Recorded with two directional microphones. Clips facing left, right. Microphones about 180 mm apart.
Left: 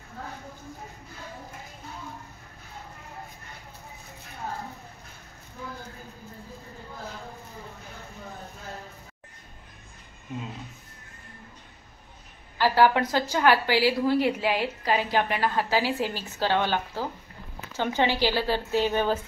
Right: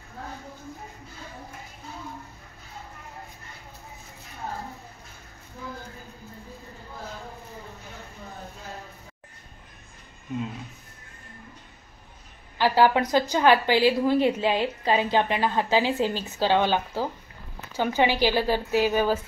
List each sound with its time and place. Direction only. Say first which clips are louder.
12.5 s a woman's voice: right 1 dB; 15° right (ahead or behind)